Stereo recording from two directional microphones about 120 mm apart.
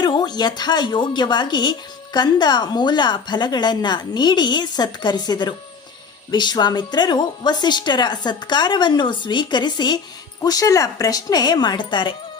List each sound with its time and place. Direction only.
0.0 s a woman's voice: 35° left (ahead or behind)